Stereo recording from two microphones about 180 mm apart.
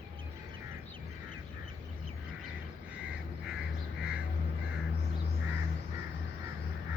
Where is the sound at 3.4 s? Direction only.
5° right (ahead or behind).